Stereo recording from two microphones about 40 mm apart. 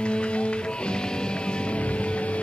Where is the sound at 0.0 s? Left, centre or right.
Left.